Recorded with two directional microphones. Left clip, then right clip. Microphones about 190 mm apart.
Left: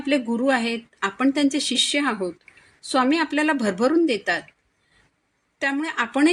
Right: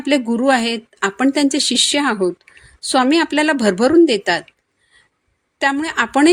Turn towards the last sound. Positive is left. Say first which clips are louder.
# right 6 dB
turn(degrees=-50)  # may be behind; listen again after turning